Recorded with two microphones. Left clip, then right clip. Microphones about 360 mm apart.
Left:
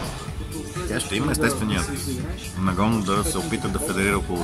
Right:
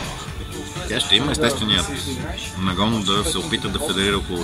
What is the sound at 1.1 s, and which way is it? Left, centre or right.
Speech, centre.